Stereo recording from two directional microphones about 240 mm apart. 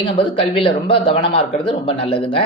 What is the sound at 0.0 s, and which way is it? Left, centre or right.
Speech, left.